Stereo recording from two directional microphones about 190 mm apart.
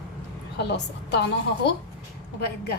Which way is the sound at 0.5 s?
60° left (ahead or behind).